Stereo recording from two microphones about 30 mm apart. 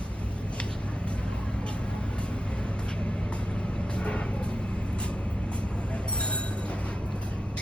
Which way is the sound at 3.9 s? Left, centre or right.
Left.